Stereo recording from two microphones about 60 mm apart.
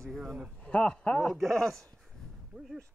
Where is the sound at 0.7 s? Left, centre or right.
Centre.